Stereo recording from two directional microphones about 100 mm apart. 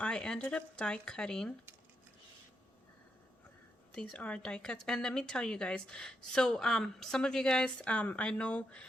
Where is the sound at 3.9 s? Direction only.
10° left (ahead or behind).